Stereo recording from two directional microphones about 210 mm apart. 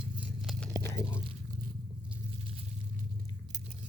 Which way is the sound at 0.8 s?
15° left (ahead or behind).